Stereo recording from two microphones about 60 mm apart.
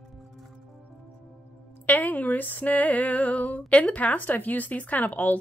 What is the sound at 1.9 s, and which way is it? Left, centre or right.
Music, left.